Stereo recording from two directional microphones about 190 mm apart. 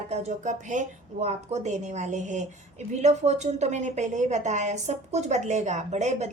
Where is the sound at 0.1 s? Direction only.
35° right (ahead or behind).